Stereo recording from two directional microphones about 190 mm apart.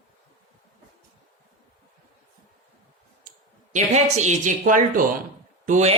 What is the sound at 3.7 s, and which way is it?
A woman's voice, 40° right (ahead or behind).